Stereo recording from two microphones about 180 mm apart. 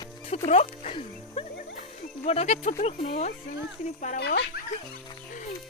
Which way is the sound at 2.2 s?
35° left (ahead or behind).